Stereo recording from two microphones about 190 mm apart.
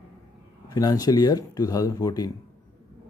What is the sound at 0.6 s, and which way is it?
Speech, 20° left (ahead or behind).